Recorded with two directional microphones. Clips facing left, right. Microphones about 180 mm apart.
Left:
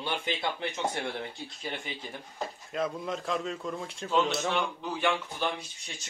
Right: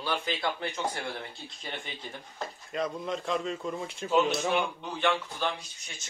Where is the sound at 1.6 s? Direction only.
10° left (ahead or behind); by 4.6 s 10° right (ahead or behind).